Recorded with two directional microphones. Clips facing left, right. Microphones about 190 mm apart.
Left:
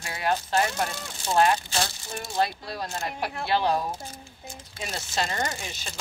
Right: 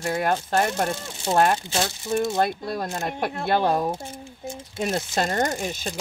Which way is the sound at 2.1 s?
50° right (ahead or behind).